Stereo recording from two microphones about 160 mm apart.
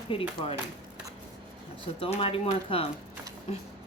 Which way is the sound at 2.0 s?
35° left (ahead or behind).